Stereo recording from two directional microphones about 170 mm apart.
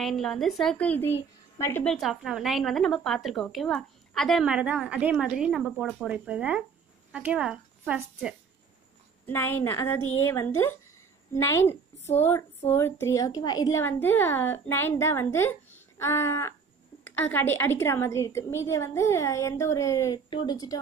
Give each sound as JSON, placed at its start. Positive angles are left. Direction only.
{"t": 0.0, "sound": "a woman's voice", "side_deg": 0}
{"t": 2.0, "sound": "a woman's voice", "side_deg": 0}
{"t": 9.2, "sound": "a woman's voice", "side_deg": 10}